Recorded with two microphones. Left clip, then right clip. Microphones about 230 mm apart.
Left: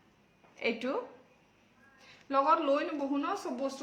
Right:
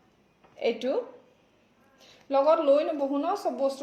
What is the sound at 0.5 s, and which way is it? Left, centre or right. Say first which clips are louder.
Speech: right 5 dB; centre.